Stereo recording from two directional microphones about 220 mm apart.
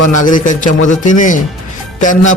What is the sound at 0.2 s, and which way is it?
A man's voice, 35° left (ahead or behind).